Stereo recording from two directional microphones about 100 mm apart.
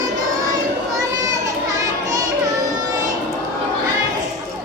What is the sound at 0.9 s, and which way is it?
Music, 35° right (ahead or behind).